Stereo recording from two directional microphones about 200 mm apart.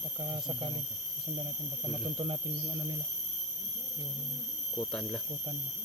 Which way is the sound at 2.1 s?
25° right (ahead or behind).